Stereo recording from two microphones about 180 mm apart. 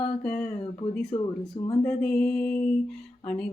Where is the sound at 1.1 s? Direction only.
35° left (ahead or behind).